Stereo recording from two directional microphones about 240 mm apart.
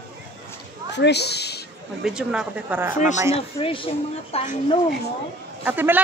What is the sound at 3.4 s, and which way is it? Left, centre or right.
Speech, left.